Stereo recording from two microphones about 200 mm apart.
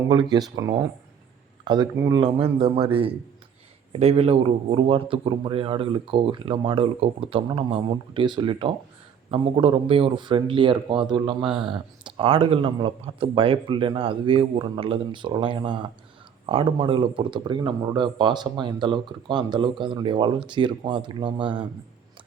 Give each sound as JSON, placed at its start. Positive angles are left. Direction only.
{"t": 0.1, "sound": "speech", "side_deg": -20}